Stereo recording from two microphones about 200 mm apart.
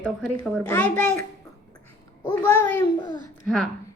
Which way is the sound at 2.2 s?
15° left (ahead or behind).